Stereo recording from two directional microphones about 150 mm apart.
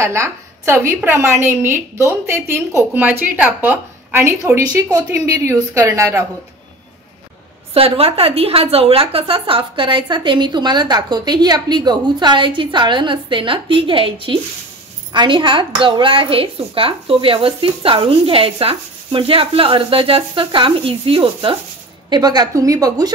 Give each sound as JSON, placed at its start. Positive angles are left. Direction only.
{"t": 0.0, "sound": "a woman's voice", "side_deg": -20}
{"t": 7.7, "sound": "a woman's voice", "side_deg": -40}